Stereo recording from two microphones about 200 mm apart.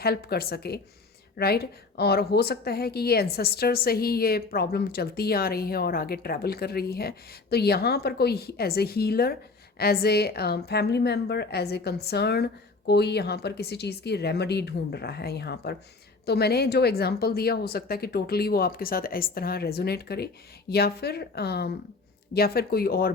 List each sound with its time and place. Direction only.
0.0 s a woman's voice: 50° left (ahead or behind)